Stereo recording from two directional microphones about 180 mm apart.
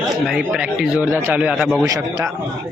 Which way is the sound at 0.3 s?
5° right (ahead or behind).